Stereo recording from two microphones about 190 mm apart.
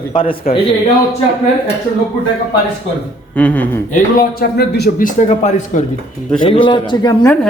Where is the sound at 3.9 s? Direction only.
50° left (ahead or behind).